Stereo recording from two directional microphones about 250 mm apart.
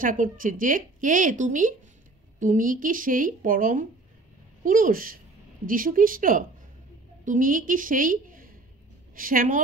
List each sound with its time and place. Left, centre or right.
0.0 s a woman's voice: right